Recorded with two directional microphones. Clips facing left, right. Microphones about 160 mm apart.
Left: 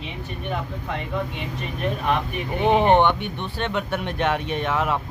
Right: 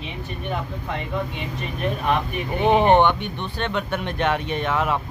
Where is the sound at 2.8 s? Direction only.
15° right (ahead or behind).